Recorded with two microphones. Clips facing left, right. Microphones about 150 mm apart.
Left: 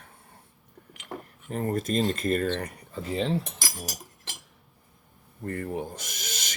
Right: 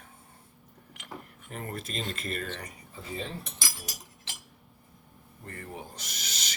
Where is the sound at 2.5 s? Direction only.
70° left (ahead or behind); by 3.4 s 85° left.